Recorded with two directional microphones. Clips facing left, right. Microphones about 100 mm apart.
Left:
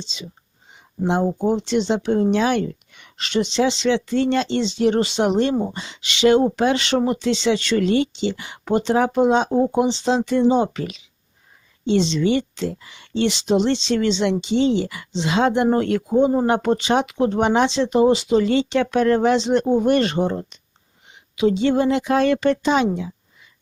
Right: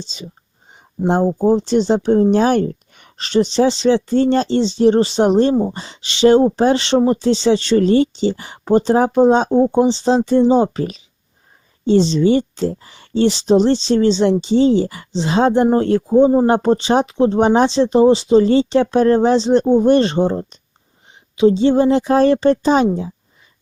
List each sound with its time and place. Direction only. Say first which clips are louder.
0.0 s speech: right 3 dB; 40° right (ahead or behind)